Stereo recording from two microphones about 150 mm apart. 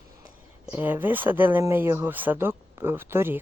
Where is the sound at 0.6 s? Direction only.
15° right (ahead or behind).